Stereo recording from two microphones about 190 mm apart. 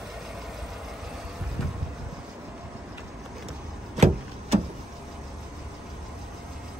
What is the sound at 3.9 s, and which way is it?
Vehicle, 35° right (ahead or behind).